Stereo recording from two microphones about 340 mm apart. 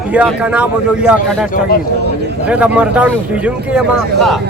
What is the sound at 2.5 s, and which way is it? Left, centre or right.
Speech, centre.